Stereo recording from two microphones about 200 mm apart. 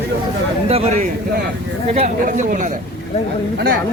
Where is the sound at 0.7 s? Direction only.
30° right (ahead or behind).